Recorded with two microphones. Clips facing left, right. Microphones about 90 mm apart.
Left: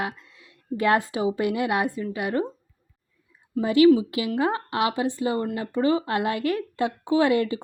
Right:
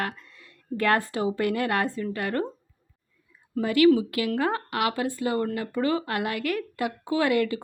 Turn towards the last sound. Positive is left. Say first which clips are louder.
# left 3 dB
turn(degrees=25)  # may be behind; listen again after turning